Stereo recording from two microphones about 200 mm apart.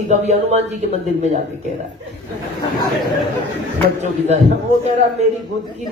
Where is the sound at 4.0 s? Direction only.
35° right (ahead or behind).